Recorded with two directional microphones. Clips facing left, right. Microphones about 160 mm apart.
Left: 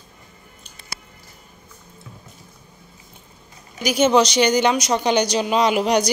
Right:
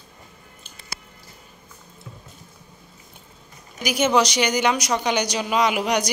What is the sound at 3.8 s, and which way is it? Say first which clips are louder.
A woman's voice: left 3 dB; 25° left (ahead or behind).